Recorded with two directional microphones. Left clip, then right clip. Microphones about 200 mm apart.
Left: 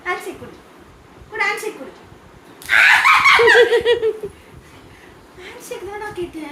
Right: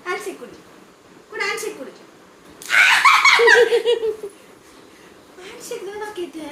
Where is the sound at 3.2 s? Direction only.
20° left (ahead or behind).